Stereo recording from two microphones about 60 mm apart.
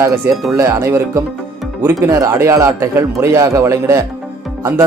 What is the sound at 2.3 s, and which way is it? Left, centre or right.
A man's voice, right.